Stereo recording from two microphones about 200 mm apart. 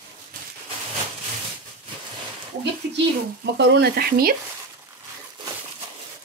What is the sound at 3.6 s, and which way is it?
Speech, 55° right (ahead or behind).